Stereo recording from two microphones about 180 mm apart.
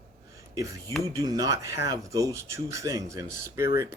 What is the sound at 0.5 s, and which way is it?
Speech, 20° right (ahead or behind).